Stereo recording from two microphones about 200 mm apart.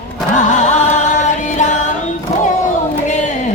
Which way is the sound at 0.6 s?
35° left (ahead or behind).